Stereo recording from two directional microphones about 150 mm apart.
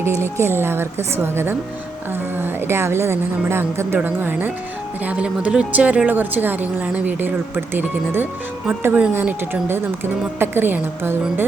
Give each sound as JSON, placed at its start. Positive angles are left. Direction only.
{"t": 0.0, "sound": "a woman's voice", "side_deg": -15}